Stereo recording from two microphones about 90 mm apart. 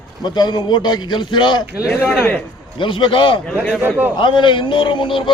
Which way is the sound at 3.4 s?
10° left (ahead or behind).